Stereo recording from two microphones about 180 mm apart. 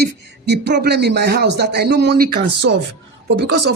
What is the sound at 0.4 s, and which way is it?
A man's voice, 70° right (ahead or behind).